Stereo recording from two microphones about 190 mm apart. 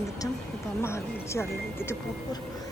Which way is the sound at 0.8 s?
15° left (ahead or behind).